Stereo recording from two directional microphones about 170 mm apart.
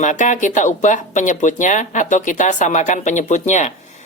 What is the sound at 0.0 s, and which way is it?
Speech, 45° left (ahead or behind).